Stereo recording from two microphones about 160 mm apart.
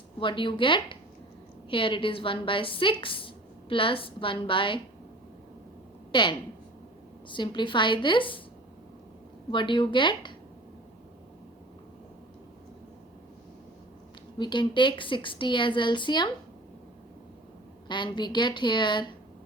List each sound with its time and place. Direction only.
0.2 s a woman's voice: 30° left (ahead or behind)
6.1 s a woman's voice: 30° left (ahead or behind)
9.5 s a woman's voice: 30° left (ahead or behind)
14.3 s a woman's voice: 30° left (ahead or behind)
17.8 s a woman's voice: 30° left (ahead or behind)